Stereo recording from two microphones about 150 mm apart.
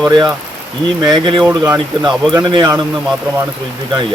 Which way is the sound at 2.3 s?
30° right (ahead or behind).